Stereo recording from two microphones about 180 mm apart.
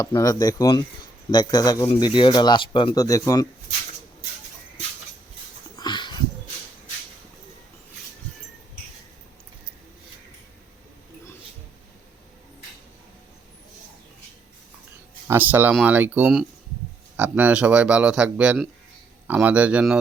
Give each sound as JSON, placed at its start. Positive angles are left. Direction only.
{"t": 0.0, "sound": "speech", "side_deg": 20}
{"t": 5.7, "sound": "a sound", "side_deg": 25}
{"t": 15.3, "sound": "a man's voice", "side_deg": -10}